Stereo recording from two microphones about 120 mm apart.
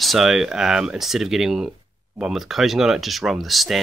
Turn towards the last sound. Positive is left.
turn(degrees=0)  # may be behind; listen again after turning